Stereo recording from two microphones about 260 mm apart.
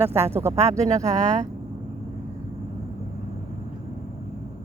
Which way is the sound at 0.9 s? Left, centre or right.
Centre.